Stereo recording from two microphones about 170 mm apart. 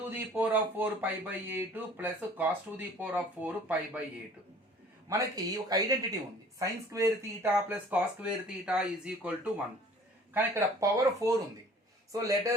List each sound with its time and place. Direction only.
0.1 s speech: 10° right (ahead or behind)
5.6 s speech: 20° right (ahead or behind)